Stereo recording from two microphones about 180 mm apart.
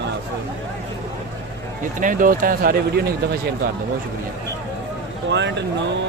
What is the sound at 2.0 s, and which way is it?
Speech, 50° right (ahead or behind).